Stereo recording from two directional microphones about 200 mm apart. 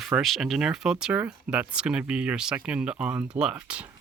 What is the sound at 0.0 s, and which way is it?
Speech, centre (ahead or behind).